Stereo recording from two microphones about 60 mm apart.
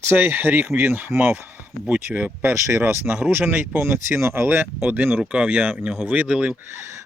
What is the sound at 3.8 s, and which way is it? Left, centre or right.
Speech, right.